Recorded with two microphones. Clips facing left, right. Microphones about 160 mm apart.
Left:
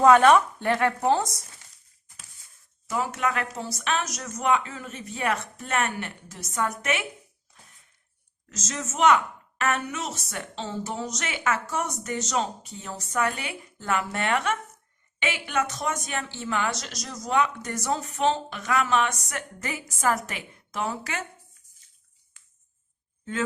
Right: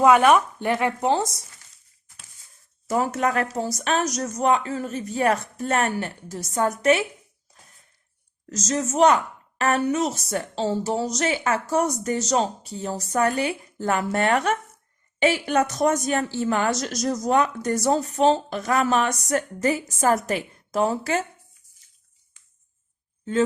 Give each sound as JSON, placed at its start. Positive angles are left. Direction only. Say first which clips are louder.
{"t": 0.0, "sound": "speech", "louder": "even", "side_deg": -10}
{"t": 2.8, "sound": "speech", "louder": "right 5 dB", "side_deg": -45}
{"t": 8.4, "sound": "speech", "louder": "right 9 dB", "side_deg": -40}